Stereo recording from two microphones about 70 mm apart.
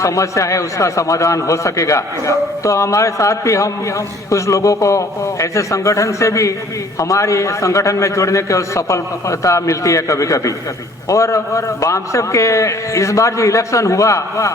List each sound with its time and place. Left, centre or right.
0.0 s a man's voice: left